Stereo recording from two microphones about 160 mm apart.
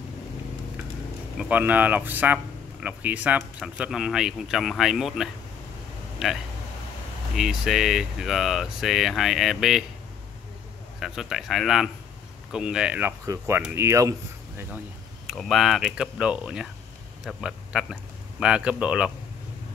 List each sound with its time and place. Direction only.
1.4 s speech: 10° right (ahead or behind)
11.0 s speech: centre (ahead or behind); by 14.1 s 20° right (ahead or behind)
15.2 s a man's voice: centre (ahead or behind)